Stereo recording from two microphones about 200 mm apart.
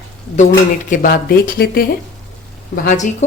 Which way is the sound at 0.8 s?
45° left (ahead or behind).